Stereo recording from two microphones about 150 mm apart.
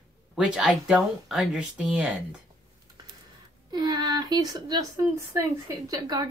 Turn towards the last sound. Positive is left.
turn(degrees=-25)  # may be behind; listen again after turning